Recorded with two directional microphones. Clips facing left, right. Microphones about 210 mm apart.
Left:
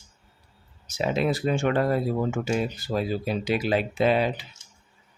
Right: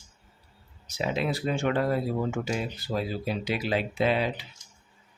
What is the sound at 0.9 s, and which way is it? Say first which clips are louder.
Speech: left 4 dB; 45° left (ahead or behind).